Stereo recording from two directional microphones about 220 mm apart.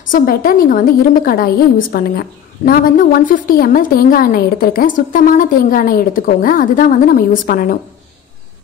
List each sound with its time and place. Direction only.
0.1 s a woman's voice: 40° left (ahead or behind)